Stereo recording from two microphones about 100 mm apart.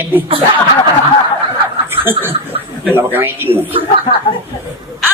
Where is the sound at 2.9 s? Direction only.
20° right (ahead or behind).